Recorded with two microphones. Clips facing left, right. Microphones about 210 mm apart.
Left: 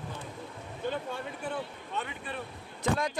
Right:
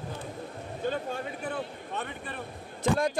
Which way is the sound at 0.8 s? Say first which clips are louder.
Right 3 dB; 50° right (ahead or behind).